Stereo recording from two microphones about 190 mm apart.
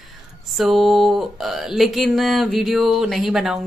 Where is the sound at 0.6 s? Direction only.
Centre (ahead or behind).